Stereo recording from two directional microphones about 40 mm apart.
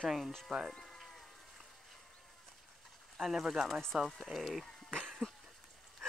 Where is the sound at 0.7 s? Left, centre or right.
Centre.